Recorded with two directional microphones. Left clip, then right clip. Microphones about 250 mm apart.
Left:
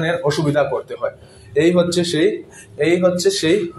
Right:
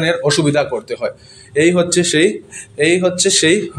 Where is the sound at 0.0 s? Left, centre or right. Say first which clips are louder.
Right 4 dB; right.